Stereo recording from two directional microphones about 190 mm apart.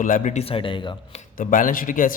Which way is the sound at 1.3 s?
45° left (ahead or behind).